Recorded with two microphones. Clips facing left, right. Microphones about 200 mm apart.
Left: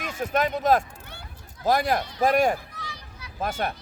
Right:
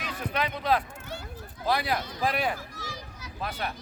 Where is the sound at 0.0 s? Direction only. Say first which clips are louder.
Left 6 dB; 45° left (ahead or behind).